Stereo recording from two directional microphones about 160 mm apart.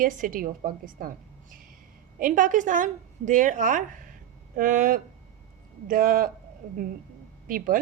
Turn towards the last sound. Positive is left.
turn(degrees=-60)  # may be behind; listen again after turning